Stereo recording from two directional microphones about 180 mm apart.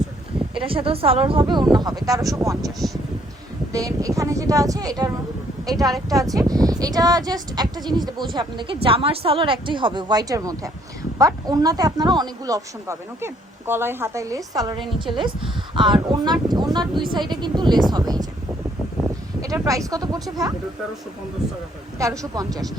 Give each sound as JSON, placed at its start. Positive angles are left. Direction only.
{"t": 0.6, "sound": "speech", "side_deg": -30}
{"t": 2.6, "sound": "speech", "side_deg": 0}
{"t": 3.7, "sound": "speech", "side_deg": -20}
{"t": 19.4, "sound": "speech", "side_deg": -20}
{"t": 21.9, "sound": "speech", "side_deg": -20}